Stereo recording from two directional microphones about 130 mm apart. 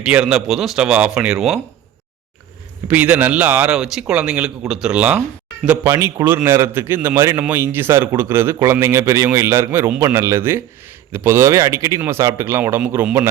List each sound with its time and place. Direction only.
0.0 s speech: 5° right (ahead or behind)
2.8 s speech: 10° right (ahead or behind)
5.8 s a man's voice: 20° right (ahead or behind)